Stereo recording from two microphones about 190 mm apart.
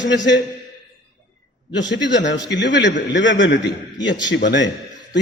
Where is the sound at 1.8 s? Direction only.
70° left (ahead or behind).